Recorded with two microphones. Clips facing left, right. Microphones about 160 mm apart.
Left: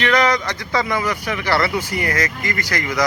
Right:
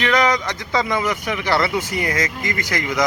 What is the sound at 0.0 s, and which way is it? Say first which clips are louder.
A man's voice: left 1 dB; 15° right (ahead or behind).